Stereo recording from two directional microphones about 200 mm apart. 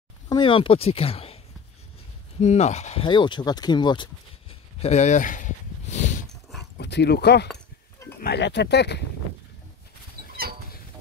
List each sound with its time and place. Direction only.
0.3 s speech: 25° left (ahead or behind)
2.4 s speech: 35° left (ahead or behind)
6.8 s speech: 55° left (ahead or behind)